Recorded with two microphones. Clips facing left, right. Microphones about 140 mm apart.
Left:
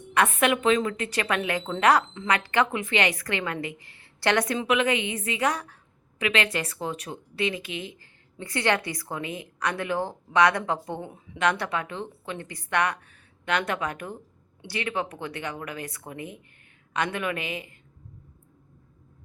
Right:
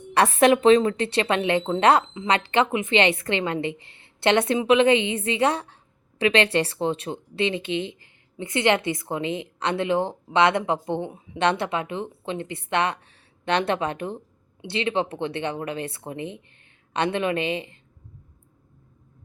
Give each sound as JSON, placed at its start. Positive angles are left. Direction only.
{"t": 0.1, "sound": "speech", "side_deg": -35}